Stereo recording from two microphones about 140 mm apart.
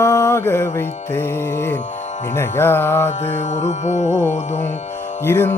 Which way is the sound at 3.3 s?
55° left (ahead or behind).